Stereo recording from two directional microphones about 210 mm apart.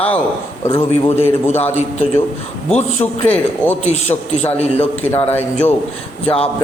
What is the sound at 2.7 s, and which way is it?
A man's voice, 30° left (ahead or behind).